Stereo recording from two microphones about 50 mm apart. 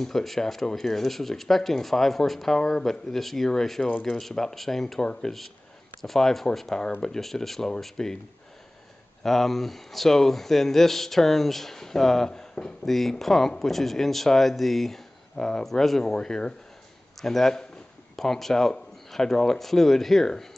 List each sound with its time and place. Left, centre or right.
0.0 s speech: centre
5.0 s speech: centre
6.0 s speech: centre
9.2 s speech: centre